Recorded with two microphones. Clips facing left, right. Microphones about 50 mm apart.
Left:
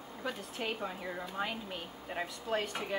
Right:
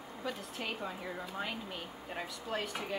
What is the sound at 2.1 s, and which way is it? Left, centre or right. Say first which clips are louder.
Speech: left 4 dB; centre.